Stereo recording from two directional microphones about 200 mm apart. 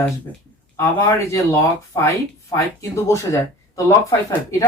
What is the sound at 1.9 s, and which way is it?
A woman's voice, 15° left (ahead or behind).